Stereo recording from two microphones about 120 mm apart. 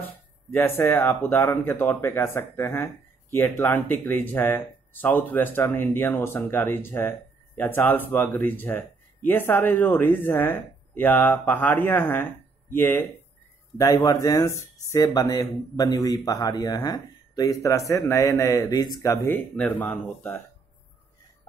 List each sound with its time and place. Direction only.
0.5 s speech: 20° left (ahead or behind)
19.2 s speech: 15° left (ahead or behind)